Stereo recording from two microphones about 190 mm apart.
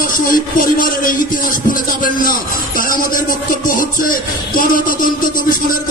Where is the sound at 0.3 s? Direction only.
45° left (ahead or behind).